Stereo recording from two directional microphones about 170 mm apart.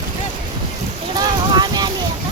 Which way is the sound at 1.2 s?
25° right (ahead or behind).